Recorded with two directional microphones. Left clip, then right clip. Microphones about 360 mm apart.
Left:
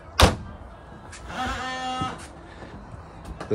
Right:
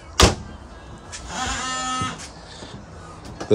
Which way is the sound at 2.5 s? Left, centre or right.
Right.